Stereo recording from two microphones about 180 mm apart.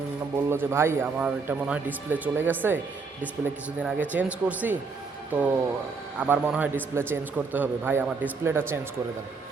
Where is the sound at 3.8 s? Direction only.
10° right (ahead or behind).